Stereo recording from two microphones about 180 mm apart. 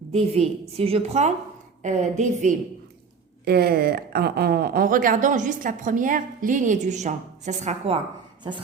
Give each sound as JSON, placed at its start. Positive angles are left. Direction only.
{"t": 0.1, "sound": "a woman's voice", "side_deg": -35}
{"t": 3.4, "sound": "speech", "side_deg": -60}